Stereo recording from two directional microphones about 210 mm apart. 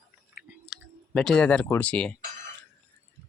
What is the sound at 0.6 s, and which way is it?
Speech, centre (ahead or behind).